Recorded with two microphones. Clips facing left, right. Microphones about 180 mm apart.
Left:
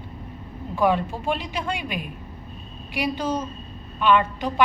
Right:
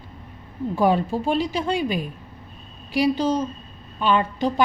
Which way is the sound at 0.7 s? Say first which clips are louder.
Right 2 dB; 35° right (ahead or behind).